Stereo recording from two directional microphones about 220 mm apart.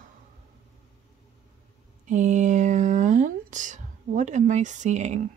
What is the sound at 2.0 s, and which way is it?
Speech, 35° right (ahead or behind).